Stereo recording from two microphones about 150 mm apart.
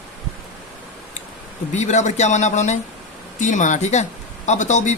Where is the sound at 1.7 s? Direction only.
50° left (ahead or behind).